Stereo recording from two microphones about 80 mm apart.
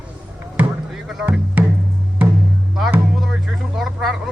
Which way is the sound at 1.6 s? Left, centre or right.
Right.